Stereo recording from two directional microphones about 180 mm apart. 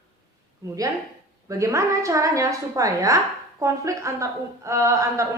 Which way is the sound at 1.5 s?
15° right (ahead or behind).